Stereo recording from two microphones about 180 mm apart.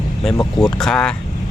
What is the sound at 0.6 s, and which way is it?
Speech, 5° left (ahead or behind).